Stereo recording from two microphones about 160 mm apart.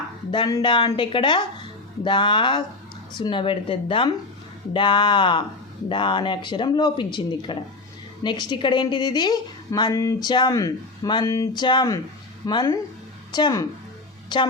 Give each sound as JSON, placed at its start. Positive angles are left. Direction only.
{"t": 0.3, "sound": "a woman's voice", "side_deg": 25}